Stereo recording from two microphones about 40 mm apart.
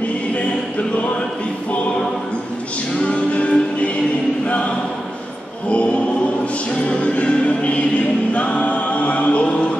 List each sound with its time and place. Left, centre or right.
0.3 s choir: left
3.1 s music: left
6.7 s music: left
8.3 s choir: left